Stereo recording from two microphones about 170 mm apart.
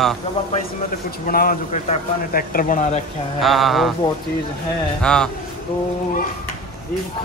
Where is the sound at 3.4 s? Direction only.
Centre (ahead or behind).